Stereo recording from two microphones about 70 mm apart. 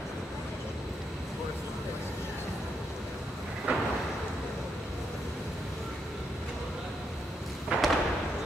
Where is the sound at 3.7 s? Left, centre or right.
Centre.